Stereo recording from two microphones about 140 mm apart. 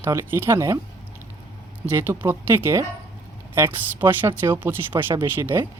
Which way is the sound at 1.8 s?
15° right (ahead or behind).